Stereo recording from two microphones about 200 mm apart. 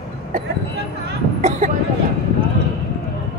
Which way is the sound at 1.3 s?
35° right (ahead or behind).